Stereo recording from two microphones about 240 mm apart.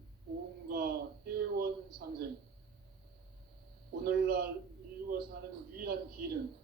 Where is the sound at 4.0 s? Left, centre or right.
Right.